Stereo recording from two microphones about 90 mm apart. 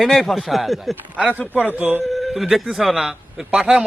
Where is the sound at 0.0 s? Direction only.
Centre (ahead or behind).